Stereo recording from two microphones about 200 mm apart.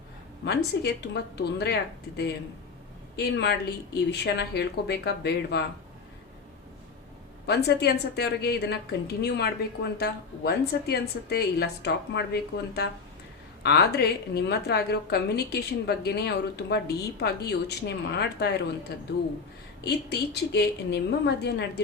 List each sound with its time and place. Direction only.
0.4 s a woman's voice: 55° left (ahead or behind)
3.2 s a woman's voice: 55° left (ahead or behind)
7.4 s a woman's voice: 55° left (ahead or behind)